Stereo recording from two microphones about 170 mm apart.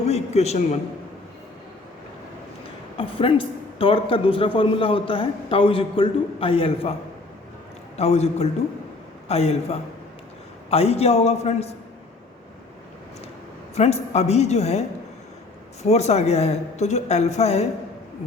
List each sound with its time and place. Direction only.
0.0 s a sound: 40° left (ahead or behind)
3.0 s a man's voice: 30° left (ahead or behind)
7.9 s a man's voice: 40° left (ahead or behind)
13.7 s a man's voice: 40° left (ahead or behind)